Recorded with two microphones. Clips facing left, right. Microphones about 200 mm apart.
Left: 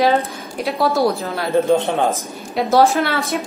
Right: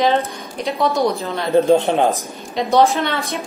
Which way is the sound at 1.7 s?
20° right (ahead or behind).